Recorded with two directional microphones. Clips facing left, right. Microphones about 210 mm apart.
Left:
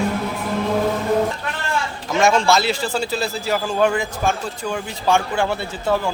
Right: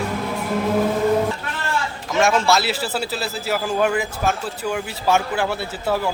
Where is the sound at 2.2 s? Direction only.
Centre (ahead or behind).